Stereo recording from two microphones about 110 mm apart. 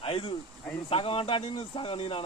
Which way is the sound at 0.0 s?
55° left (ahead or behind).